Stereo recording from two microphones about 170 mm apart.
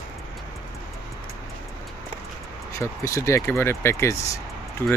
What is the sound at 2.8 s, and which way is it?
Speech, 15° left (ahead or behind).